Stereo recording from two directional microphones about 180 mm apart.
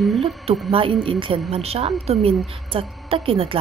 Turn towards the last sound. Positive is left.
turn(degrees=-30)  # may be behind; listen again after turning